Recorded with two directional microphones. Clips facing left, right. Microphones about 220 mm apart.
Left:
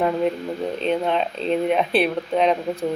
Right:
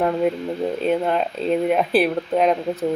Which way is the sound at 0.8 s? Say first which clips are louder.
Even; 5° right (ahead or behind).